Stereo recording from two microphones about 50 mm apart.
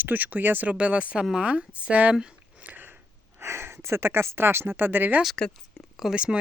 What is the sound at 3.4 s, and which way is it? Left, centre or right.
Speech, right.